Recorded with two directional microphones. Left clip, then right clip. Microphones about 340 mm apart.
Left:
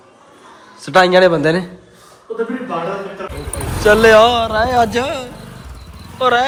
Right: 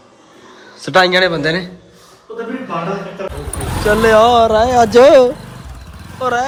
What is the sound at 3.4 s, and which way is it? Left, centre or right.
A man's voice, centre.